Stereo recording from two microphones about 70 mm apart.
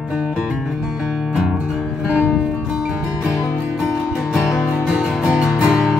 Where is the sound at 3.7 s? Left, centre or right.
Centre.